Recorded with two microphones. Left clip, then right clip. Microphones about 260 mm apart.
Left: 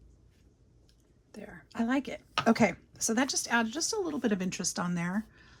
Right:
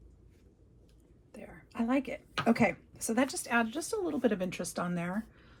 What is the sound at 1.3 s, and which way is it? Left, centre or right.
Whispering, left.